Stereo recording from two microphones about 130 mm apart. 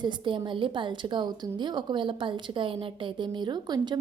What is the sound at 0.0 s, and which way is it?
A woman's voice, 35° right (ahead or behind).